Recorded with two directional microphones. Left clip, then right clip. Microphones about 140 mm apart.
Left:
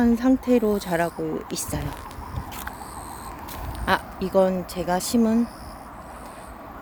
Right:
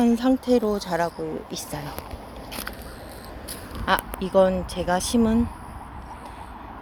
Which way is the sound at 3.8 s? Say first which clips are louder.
Even; 25° left (ahead or behind).